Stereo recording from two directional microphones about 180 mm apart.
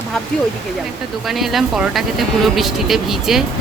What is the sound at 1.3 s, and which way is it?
Speech, centre (ahead or behind).